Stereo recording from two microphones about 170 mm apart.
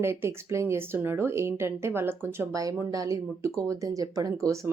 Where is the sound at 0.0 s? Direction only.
15° right (ahead or behind).